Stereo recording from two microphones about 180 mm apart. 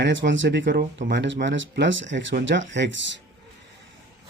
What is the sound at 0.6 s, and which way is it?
Speech, 70° right (ahead or behind).